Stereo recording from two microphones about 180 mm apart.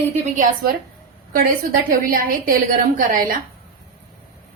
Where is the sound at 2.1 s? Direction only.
50° right (ahead or behind).